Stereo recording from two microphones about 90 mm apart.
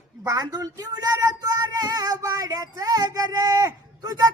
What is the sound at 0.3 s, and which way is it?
Female singing, 40° right (ahead or behind).